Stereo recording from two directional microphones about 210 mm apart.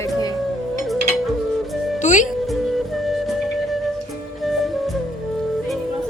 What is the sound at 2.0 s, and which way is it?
Music, 35° left (ahead or behind).